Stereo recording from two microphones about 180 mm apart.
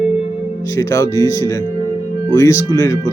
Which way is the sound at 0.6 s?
20° left (ahead or behind).